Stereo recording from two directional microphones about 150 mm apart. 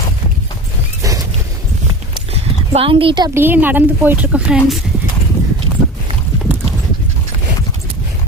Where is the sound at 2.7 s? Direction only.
40° right (ahead or behind).